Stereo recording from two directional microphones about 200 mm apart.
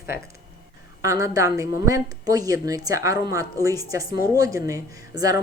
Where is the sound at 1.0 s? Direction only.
15° right (ahead or behind).